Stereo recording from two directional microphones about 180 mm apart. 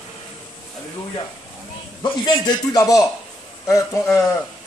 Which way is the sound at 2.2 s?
20° left (ahead or behind).